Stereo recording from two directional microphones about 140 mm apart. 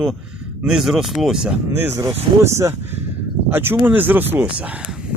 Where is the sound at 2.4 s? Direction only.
20° right (ahead or behind).